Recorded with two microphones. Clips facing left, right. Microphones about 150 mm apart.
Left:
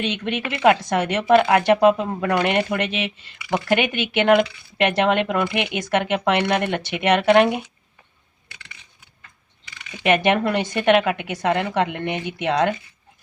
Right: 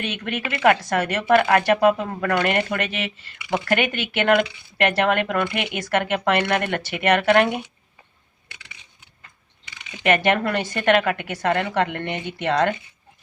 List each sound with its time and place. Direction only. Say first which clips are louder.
0.0 s speech: left 3 dB; 20° left (ahead or behind)
10.0 s speech: left 1 dB; 15° left (ahead or behind)